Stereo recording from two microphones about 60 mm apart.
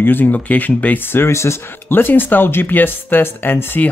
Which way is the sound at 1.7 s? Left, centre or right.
Left.